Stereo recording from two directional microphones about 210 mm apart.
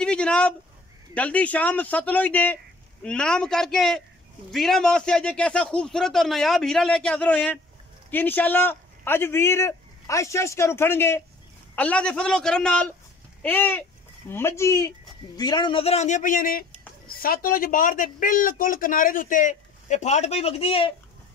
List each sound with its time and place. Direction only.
0.0 s speech: 5° left (ahead or behind); by 20.9 s 25° left (ahead or behind)